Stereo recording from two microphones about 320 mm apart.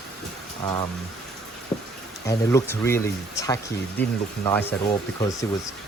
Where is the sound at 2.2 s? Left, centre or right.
Centre.